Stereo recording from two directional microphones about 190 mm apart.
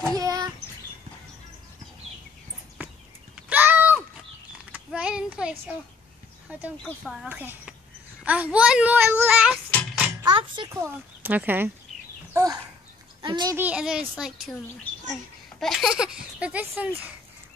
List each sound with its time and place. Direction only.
0.1 s child singing: 20° right (ahead or behind)
3.3 s a sound: 10° right (ahead or behind)
4.9 s child singing: 5° right (ahead or behind)
6.8 s speech: 5° right (ahead or behind)
9.7 s a sound: 5° left (ahead or behind)
10.2 s speech: 25° right (ahead or behind)
10.7 s speech: 10° right (ahead or behind)
13.2 s speech: 20° right (ahead or behind)
13.6 s speech: 5° right (ahead or behind)
15.6 s speech: centre (ahead or behind)